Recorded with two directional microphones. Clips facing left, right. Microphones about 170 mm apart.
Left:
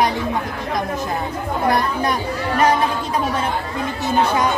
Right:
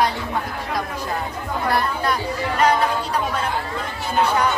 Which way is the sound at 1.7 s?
20° left (ahead or behind).